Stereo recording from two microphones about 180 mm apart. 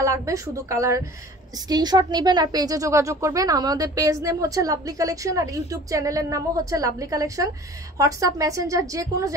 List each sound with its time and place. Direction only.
0.0 s a woman's voice: 15° right (ahead or behind)